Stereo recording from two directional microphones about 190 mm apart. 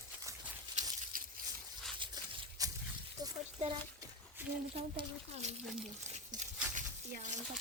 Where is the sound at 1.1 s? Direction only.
45° right (ahead or behind).